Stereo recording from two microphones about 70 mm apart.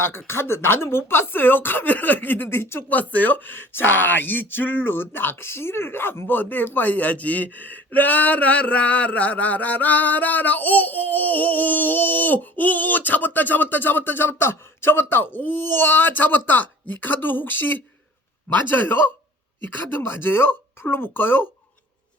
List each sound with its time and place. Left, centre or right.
0.0 s speech: left
2.9 s speech: left